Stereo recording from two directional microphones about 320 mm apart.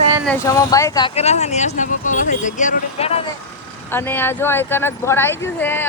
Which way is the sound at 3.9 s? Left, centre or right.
Centre.